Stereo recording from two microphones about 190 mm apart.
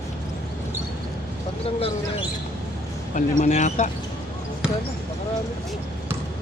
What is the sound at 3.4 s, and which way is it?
Speech, 40° left (ahead or behind).